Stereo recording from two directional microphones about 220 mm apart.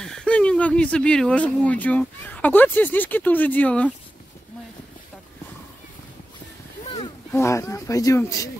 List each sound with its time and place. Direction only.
0.0 s speech: 5° left (ahead or behind)
7.3 s speech: 15° left (ahead or behind)